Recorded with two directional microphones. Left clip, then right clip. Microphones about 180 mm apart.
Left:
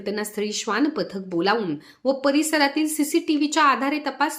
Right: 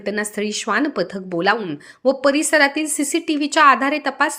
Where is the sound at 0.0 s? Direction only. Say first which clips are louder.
Right 4 dB; 25° right (ahead or behind).